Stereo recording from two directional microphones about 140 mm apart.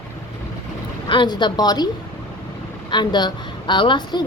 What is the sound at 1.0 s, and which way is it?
Speech, 35° left (ahead or behind).